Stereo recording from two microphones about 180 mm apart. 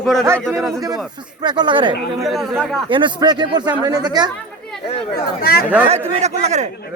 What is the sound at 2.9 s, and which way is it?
Speech, 25° right (ahead or behind).